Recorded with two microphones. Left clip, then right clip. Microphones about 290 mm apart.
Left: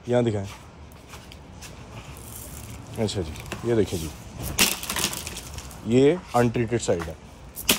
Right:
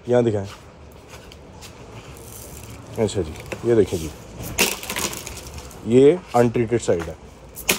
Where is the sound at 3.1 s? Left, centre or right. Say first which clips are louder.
Right 5 dB; centre.